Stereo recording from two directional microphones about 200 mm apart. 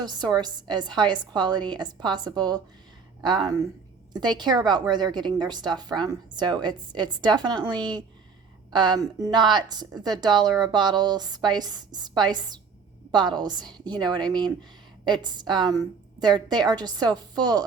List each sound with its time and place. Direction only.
0.0 s a woman's voice: 20° right (ahead or behind)